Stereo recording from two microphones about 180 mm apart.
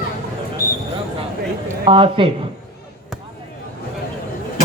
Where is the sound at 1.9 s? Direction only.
30° right (ahead or behind).